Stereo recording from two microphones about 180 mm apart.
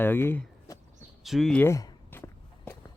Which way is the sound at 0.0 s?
10° left (ahead or behind).